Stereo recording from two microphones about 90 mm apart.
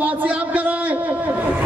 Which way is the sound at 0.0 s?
15° right (ahead or behind).